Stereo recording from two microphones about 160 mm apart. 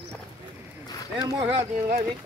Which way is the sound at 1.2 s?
25° right (ahead or behind).